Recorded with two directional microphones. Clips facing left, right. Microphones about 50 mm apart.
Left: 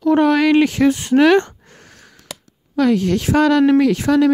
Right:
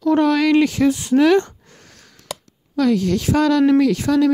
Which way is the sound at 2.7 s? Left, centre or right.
Left.